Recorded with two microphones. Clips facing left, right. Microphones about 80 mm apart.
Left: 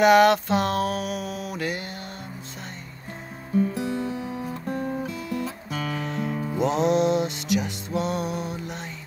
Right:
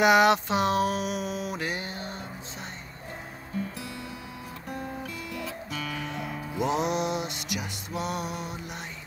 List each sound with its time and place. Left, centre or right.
0.0 s a sound: centre
3.7 s music: left
4.6 s guitar: left
5.9 s music: centre
6.6 s music: centre